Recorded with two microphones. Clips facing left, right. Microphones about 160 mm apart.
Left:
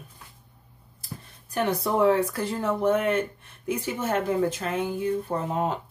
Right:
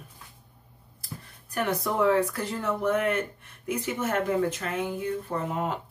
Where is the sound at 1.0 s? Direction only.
25° left (ahead or behind).